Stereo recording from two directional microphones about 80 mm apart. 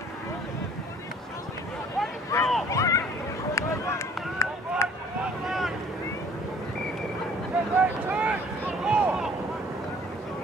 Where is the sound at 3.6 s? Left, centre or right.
Left.